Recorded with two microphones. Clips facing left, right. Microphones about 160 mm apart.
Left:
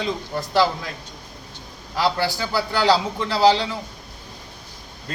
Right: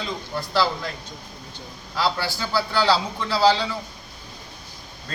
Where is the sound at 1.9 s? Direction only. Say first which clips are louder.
Left 3 dB; 15° left (ahead or behind).